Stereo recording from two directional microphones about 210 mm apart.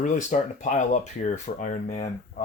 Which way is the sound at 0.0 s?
35° left (ahead or behind).